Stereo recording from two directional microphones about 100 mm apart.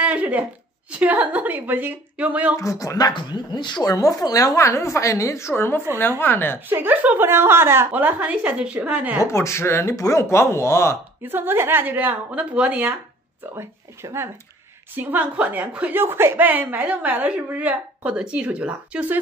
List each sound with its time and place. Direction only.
0.0 s a sound: 15° right (ahead or behind)
0.9 s speech: 15° right (ahead or behind)
2.5 s a woman's voice: 35° left (ahead or behind)
3.1 s speech: 50° left (ahead or behind)
3.9 s a woman's voice: 35° left (ahead or behind)
6.7 s speech: 20° right (ahead or behind)
9.2 s speech: 30° left (ahead or behind)
11.2 s a woman's voice: 20° right (ahead or behind)